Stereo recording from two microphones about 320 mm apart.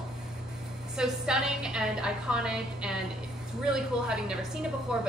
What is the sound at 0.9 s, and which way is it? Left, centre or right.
A woman's voice, centre.